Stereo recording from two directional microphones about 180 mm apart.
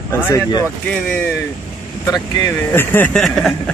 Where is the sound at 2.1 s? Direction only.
20° left (ahead or behind); by 3.6 s centre (ahead or behind).